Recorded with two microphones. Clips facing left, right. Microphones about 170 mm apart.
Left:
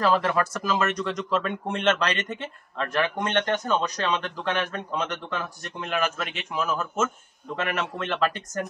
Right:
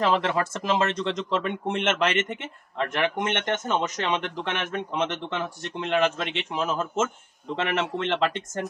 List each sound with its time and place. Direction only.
0.0 s speech: 25° right (ahead or behind)